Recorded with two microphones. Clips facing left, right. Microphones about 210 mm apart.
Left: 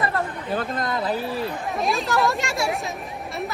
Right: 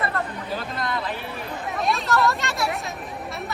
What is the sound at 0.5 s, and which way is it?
Speech, 45° left (ahead or behind).